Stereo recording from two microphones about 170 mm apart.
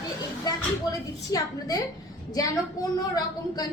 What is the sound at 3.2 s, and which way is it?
Speech, 25° left (ahead or behind).